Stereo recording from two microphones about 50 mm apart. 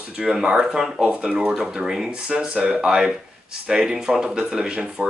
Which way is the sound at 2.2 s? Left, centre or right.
Right.